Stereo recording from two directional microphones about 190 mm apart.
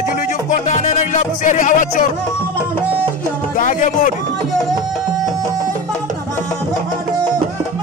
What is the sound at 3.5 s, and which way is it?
Speech, 45° left (ahead or behind).